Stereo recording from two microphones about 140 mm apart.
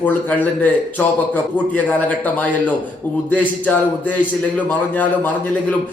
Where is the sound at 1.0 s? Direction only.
10° left (ahead or behind).